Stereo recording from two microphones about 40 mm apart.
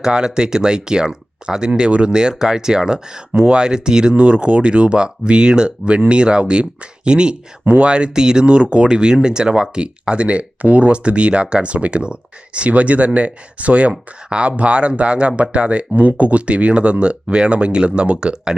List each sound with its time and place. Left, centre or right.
0.0 s speech: centre
4.1 s speech: right